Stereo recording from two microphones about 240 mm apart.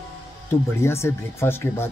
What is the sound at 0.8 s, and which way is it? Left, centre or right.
Speech, centre.